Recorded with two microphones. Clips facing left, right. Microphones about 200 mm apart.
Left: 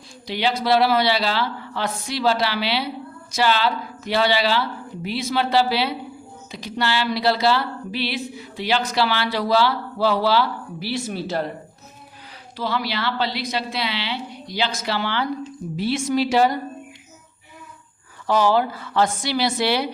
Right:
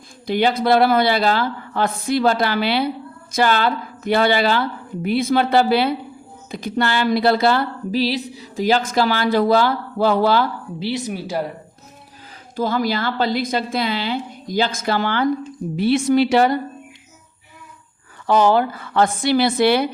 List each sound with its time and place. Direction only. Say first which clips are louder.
0.3 s speech: right 4 dB; 50° right (ahead or behind)
10.8 s speech: right 3 dB; 20° right (ahead or behind)
12.5 s speech: right 5 dB; 45° right (ahead or behind)
15.7 s a woman's voice: right 6 dB; 60° right (ahead or behind)
18.3 s speech: right 3 dB; 55° right (ahead or behind)